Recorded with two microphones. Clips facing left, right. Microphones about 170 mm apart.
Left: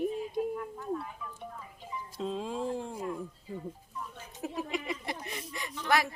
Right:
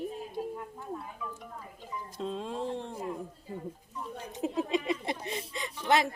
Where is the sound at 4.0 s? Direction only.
20° right (ahead or behind).